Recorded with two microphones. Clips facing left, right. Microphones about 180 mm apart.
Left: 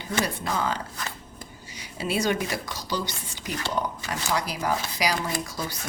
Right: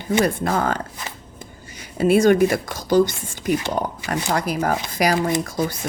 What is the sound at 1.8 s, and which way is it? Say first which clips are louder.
Speech: right 11 dB; 50° right (ahead or behind).